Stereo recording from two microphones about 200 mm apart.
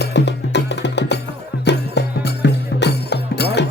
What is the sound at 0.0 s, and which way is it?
Music, 60° left (ahead or behind).